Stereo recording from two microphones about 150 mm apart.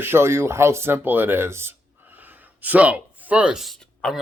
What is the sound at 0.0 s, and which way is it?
Speech, 15° right (ahead or behind).